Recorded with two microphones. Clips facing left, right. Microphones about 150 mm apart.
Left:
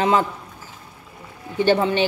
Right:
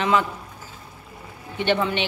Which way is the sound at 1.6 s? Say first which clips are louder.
Left 5 dB; 40° left (ahead or behind).